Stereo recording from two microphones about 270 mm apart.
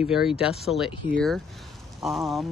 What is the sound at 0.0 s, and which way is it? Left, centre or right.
Speech, centre.